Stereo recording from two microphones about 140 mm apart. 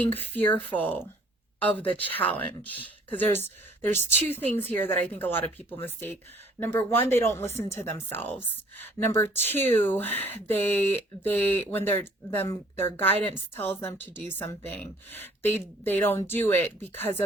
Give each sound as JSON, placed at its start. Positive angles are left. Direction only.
{"t": 0.0, "sound": "speech", "side_deg": 15}